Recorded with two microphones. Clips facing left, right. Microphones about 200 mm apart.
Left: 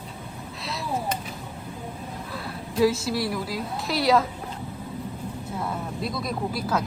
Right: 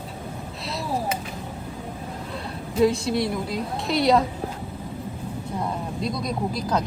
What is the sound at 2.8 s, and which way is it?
A woman's voice, 5° left (ahead or behind).